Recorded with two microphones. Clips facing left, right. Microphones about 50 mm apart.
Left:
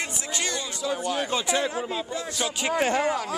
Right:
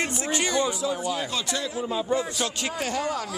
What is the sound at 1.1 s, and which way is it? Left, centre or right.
Speech, left.